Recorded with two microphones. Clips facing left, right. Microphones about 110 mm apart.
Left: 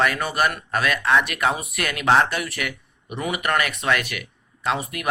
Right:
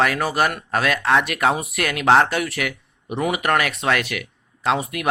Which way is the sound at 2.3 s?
80° right.